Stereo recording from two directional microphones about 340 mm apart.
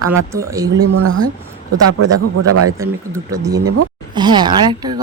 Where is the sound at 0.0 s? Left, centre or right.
Right.